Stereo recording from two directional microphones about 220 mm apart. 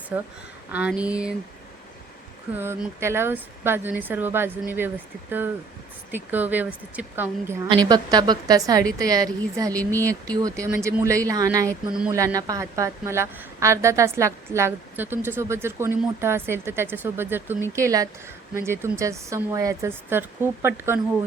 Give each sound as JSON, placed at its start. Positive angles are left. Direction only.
{"t": 0.1, "sound": "a woman's voice", "side_deg": -5}
{"t": 2.5, "sound": "a woman's voice", "side_deg": -10}
{"t": 6.1, "sound": "a woman's voice", "side_deg": -10}
{"t": 9.7, "sound": "speech", "side_deg": 10}
{"t": 10.3, "sound": "a woman's voice", "side_deg": -15}